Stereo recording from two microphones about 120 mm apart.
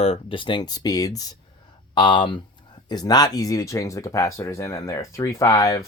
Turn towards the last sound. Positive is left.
turn(degrees=30)  # may be behind; listen again after turning